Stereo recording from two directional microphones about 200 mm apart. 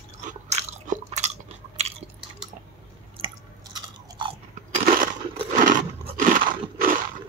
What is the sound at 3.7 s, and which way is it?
Chewing, 20° right (ahead or behind).